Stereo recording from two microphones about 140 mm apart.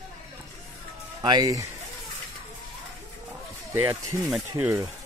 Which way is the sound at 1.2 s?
30° right (ahead or behind).